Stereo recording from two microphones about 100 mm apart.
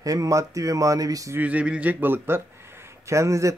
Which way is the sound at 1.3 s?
15° right (ahead or behind).